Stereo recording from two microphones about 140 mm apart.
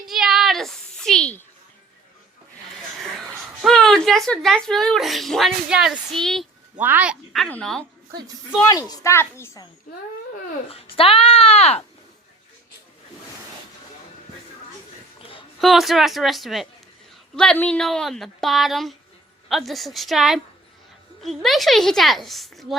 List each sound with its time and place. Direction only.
0.1 s a sound: centre (ahead or behind)
3.0 s a woman's voice: centre (ahead or behind)
6.7 s speech: 10° right (ahead or behind)
7.4 s speech: 5° left (ahead or behind)
8.6 s a woman's voice: 25° left (ahead or behind)
10.7 s speech: 40° left (ahead or behind)
15.2 s a sound: 40° left (ahead or behind)
15.6 s speech: centre (ahead or behind)